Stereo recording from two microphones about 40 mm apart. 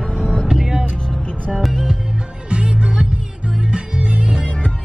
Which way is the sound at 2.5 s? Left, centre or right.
Right.